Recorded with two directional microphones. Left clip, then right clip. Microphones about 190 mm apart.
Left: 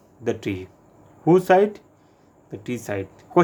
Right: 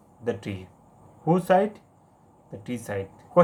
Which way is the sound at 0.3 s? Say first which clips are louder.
Left 4 dB; 45° left (ahead or behind).